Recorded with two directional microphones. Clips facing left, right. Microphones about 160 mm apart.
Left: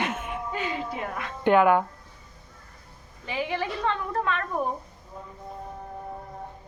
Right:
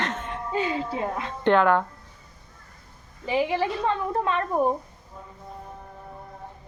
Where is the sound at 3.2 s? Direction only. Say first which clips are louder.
Right 5 dB; 25° right (ahead or behind).